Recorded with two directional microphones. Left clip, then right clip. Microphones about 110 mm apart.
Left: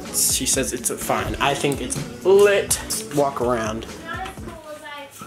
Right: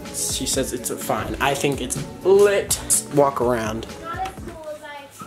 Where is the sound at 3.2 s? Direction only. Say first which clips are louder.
Right 2 dB; 25° right (ahead or behind).